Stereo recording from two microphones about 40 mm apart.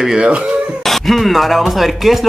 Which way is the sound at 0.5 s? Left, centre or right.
Right.